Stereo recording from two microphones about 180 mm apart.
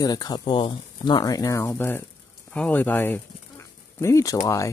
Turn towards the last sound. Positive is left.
turn(degrees=15)  # may be behind; listen again after turning